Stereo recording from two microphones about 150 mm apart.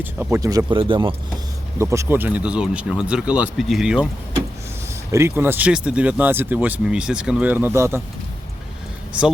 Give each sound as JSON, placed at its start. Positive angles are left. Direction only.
{"t": 0.0, "sound": "speech", "side_deg": -15}
{"t": 0.8, "sound": "speech", "side_deg": -35}
{"t": 1.8, "sound": "speech", "side_deg": -20}
{"t": 5.1, "sound": "speech", "side_deg": -15}
{"t": 9.1, "sound": "speech", "side_deg": -10}